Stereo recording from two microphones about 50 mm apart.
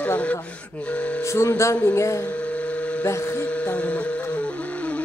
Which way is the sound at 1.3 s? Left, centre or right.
Left.